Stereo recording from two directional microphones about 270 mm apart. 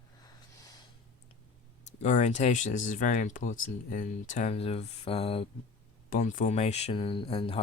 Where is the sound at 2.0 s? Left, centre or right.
Left.